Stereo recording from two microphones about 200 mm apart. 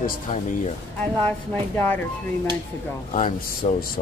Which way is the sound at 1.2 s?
10° left (ahead or behind).